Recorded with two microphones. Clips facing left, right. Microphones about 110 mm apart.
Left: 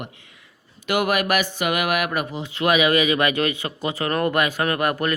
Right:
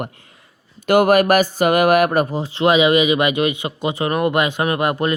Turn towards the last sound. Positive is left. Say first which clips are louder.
# right 3 dB
turn(degrees=-20)  # may be behind; listen again after turning